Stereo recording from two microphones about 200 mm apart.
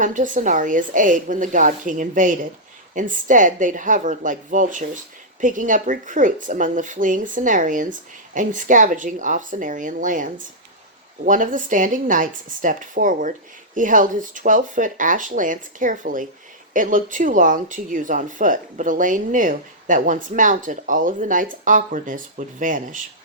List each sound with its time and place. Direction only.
0.0 s speech: 40° right (ahead or behind)